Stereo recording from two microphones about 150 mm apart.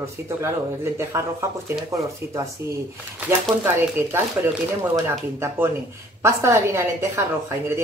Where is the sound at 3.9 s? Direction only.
15° right (ahead or behind).